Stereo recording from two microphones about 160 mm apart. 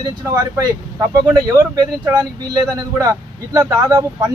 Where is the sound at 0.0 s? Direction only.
20° right (ahead or behind).